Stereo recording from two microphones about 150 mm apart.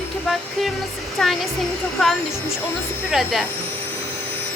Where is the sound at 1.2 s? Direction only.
5° left (ahead or behind).